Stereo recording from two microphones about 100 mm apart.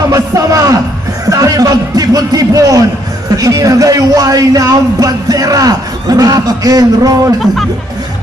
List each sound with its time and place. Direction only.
0.1 s music: 35° right (ahead or behind)
1.3 s speech: 40° right (ahead or behind)